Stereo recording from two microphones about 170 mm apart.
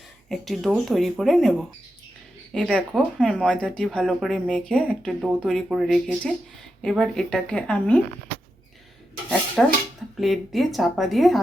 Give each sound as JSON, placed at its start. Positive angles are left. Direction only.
{"t": 0.3, "sound": "speech", "side_deg": 0}
{"t": 2.7, "sound": "speech", "side_deg": 0}
{"t": 9.6, "sound": "speech", "side_deg": 0}